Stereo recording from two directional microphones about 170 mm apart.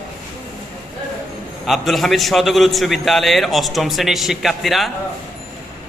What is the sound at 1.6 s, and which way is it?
A man's voice, centre (ahead or behind).